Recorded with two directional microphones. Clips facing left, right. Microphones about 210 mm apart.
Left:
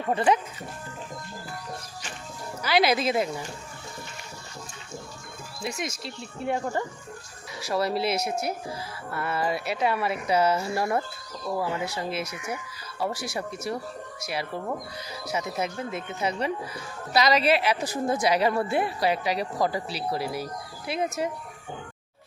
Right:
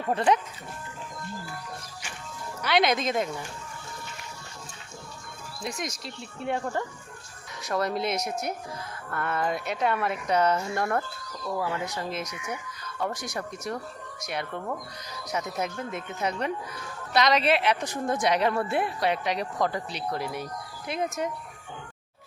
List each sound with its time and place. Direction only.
0.1 s a woman's voice: 5° left (ahead or behind)
2.6 s a woman's voice: centre (ahead or behind)
5.6 s a woman's voice: centre (ahead or behind)